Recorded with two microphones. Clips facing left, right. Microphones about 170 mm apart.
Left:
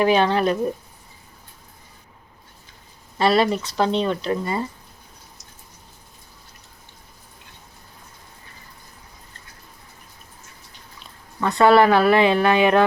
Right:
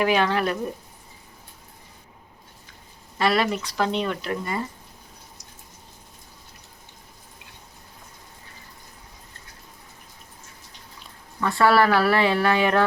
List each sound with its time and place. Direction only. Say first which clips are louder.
0.0 s speech: left 4 dB; 30° left (ahead or behind)
3.2 s speech: left 4 dB; 30° left (ahead or behind)
11.0 s speech: left 2 dB; 20° left (ahead or behind)